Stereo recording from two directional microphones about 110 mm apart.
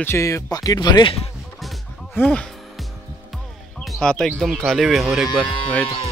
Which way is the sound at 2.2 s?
20° left (ahead or behind).